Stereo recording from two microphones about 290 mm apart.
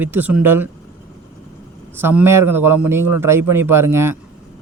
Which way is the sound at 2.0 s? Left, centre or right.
Centre.